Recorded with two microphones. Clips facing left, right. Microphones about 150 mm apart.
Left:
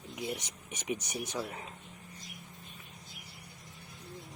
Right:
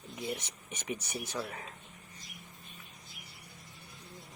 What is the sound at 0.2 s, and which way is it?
Speech, 15° left (ahead or behind).